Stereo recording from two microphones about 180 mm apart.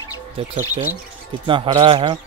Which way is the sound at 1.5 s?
25° right (ahead or behind).